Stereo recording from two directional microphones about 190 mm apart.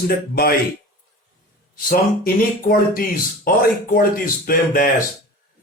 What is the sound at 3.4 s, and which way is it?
Speech, 50° left (ahead or behind).